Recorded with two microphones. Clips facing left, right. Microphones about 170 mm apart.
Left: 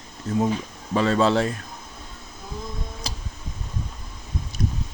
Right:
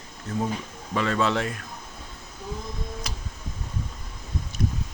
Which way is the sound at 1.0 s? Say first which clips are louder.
Left 5 dB; 30° left (ahead or behind).